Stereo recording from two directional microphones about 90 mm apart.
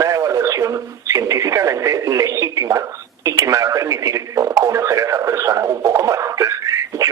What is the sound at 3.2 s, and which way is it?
Radio, 35° right (ahead or behind).